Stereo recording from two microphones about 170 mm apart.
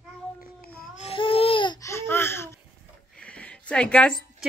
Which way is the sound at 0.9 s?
35° left (ahead or behind).